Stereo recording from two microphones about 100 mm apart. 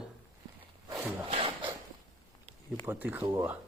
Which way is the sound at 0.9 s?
35° right (ahead or behind).